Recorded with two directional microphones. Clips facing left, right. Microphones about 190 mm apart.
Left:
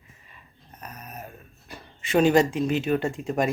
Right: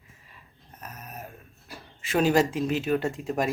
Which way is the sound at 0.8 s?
Centre (ahead or behind).